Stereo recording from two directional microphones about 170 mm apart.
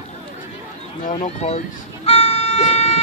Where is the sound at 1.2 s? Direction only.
40° left (ahead or behind).